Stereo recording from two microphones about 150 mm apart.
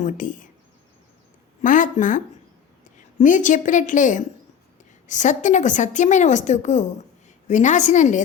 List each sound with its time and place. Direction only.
0.0 s a woman's voice: 60° left (ahead or behind)
1.6 s a woman's voice: 60° left (ahead or behind)